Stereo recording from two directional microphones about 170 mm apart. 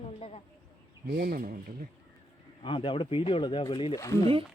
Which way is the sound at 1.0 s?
60° right (ahead or behind).